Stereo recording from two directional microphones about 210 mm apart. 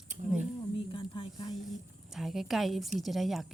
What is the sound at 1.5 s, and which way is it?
Speech, centre (ahead or behind).